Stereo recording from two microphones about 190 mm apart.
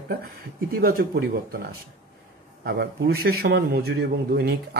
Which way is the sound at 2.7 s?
55° right (ahead or behind).